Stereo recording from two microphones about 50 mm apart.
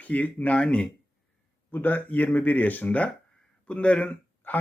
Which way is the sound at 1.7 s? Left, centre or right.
Left.